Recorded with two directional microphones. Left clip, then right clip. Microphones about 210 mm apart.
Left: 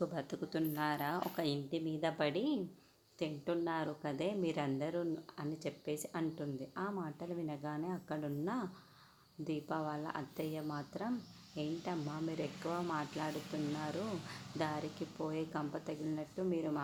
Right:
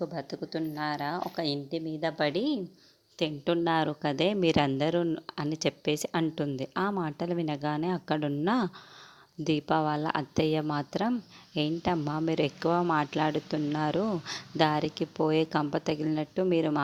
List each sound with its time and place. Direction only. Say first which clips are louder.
0.0 s a woman's voice: right 5 dB; 20° right (ahead or behind); by 16.8 s 40° right (ahead or behind)